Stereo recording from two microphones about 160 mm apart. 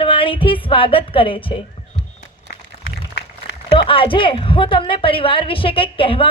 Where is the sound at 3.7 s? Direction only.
35° left (ahead or behind).